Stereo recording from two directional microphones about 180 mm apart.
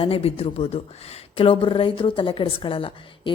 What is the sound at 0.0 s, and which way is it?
A woman's voice, 35° left (ahead or behind).